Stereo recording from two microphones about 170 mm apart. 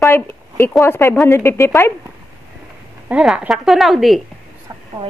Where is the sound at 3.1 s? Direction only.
5° right (ahead or behind).